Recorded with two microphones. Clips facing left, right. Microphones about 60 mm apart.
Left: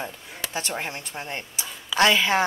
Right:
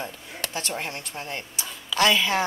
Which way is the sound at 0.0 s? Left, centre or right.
Centre.